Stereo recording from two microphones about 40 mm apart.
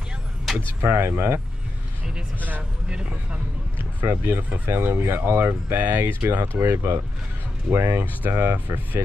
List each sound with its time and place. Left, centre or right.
0.8 s speech: right
2.9 s speech: right
4.0 s speech: right
4.4 s speech: right
4.6 s speech: right
8.3 s speech: right